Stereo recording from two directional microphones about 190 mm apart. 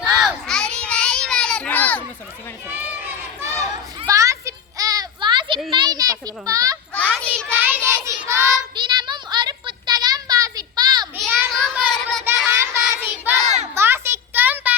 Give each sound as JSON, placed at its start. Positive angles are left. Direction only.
{"t": 0.0, "sound": "children playing", "side_deg": 0}
{"t": 2.6, "sound": "a sound", "side_deg": -10}
{"t": 7.1, "sound": "child singing", "side_deg": 5}
{"t": 7.5, "sound": "child singing", "side_deg": -10}
{"t": 11.2, "sound": "child singing", "side_deg": 0}
{"t": 12.5, "sound": "child singing", "side_deg": -15}
{"t": 13.7, "sound": "a sound", "side_deg": -15}